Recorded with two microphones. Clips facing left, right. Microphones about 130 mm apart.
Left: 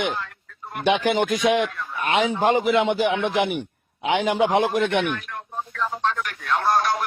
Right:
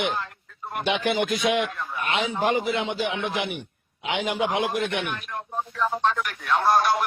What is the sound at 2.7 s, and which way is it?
Speech, 55° left (ahead or behind).